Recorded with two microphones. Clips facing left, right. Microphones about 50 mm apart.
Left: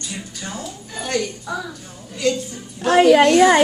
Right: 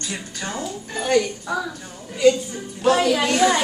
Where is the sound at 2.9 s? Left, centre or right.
Left.